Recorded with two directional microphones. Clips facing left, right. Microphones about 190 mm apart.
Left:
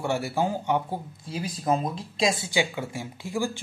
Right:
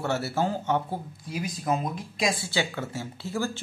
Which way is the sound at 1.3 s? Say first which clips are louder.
Left 2 dB; 30° left (ahead or behind).